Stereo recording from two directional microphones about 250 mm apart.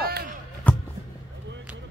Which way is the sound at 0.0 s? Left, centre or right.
Right.